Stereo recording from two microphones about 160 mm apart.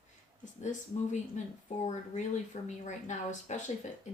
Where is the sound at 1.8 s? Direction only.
45° left (ahead or behind).